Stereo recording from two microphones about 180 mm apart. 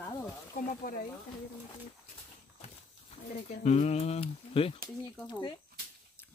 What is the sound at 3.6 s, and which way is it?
Speech, 40° left (ahead or behind).